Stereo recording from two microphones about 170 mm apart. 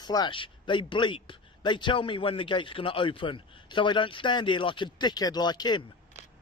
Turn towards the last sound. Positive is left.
turn(degrees=25)  # may be behind; listen again after turning